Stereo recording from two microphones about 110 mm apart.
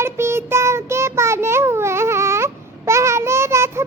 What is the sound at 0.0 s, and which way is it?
Child singing, 25° right (ahead or behind).